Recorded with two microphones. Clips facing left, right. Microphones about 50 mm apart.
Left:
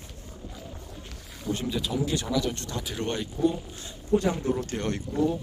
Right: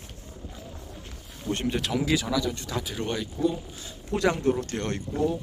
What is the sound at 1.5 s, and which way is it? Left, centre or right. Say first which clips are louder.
Speech: right 2 dB; right.